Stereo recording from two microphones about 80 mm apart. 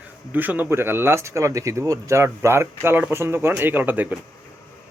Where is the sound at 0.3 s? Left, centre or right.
Right.